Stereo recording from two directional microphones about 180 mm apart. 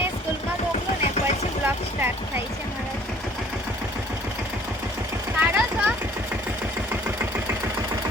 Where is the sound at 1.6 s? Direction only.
10° right (ahead or behind).